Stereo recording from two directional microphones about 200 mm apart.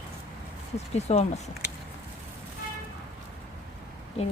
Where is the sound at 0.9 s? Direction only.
30° left (ahead or behind).